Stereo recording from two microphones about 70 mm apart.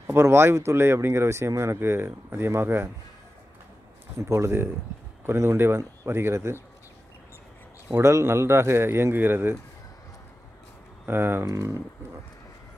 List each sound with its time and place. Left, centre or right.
0.0 s speech: right
4.2 s speech: right
7.9 s speech: right
11.1 s speech: right